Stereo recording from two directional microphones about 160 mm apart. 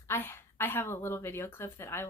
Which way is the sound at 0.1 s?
15° left (ahead or behind).